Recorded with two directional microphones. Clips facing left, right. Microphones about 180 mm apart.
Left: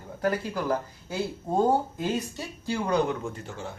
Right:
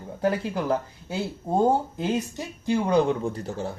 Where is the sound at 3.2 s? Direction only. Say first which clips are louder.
Right 6 dB; 35° right (ahead or behind).